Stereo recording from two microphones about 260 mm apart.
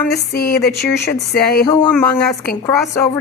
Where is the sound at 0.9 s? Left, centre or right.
Left.